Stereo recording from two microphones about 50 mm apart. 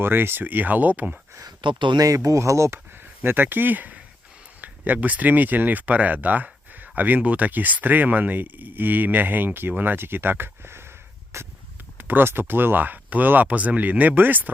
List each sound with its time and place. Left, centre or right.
0.0 s speech: right
2.1 s speech: right
2.7 s speech: right
11.3 s a sound: right
11.9 s speech: right